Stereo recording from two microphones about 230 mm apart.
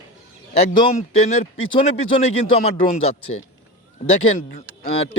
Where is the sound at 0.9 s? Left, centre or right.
Left.